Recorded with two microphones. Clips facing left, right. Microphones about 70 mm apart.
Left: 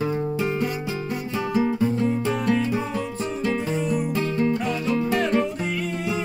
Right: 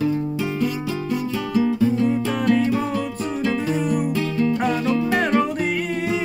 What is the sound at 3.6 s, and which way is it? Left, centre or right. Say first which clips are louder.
Music: right 3 dB; right.